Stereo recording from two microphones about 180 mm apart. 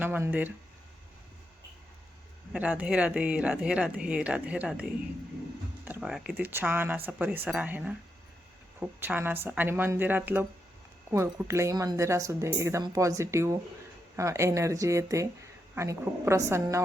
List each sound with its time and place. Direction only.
0.0 s speech: 10° right (ahead or behind)
2.5 s speech: 5° right (ahead or behind)